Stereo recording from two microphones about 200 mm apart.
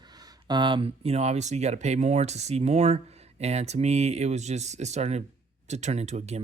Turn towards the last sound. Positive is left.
turn(degrees=-35)  # may be behind; listen again after turning